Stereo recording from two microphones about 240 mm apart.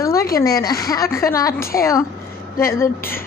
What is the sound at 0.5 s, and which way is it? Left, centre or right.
A woman's voice, centre.